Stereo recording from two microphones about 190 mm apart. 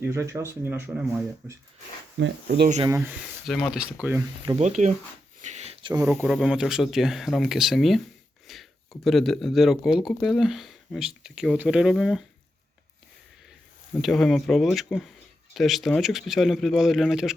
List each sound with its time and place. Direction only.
0.0 s speech: 15° right (ahead or behind)
2.1 s speech: 65° right (ahead or behind)
2.8 s speech: 10° right (ahead or behind)
4.4 s speech: 35° right (ahead or behind)
5.4 s a sound: 35° right (ahead or behind)
6.1 s speech: 5° right (ahead or behind)
14.0 s speech: centre (ahead or behind)